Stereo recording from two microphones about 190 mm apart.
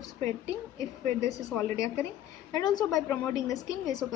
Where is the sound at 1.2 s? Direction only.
15° left (ahead or behind).